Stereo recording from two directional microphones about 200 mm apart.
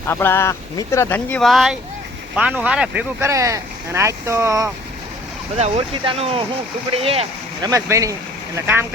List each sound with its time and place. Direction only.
0.1 s speech: 10° left (ahead or behind); by 4.7 s 15° right (ahead or behind)
5.5 s speech: 30° right (ahead or behind)
7.7 s speech: 15° right (ahead or behind)